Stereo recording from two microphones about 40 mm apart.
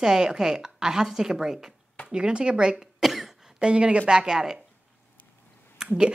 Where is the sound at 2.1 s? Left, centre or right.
Right.